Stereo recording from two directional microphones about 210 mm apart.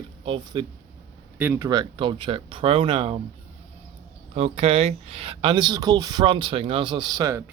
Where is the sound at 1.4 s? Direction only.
10° right (ahead or behind).